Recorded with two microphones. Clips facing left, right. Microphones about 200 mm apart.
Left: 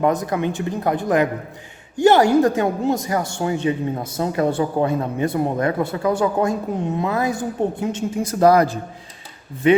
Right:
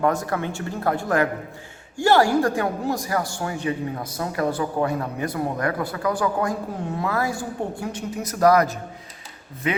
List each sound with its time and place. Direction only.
0.0 s a man's voice: 20° left (ahead or behind)